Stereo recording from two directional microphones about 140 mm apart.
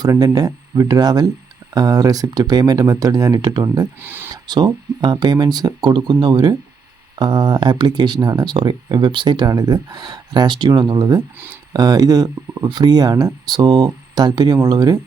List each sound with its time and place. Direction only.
0.0 s speech: 25° right (ahead or behind)
4.0 s speech: 15° right (ahead or behind)
4.4 s speech: 30° right (ahead or behind)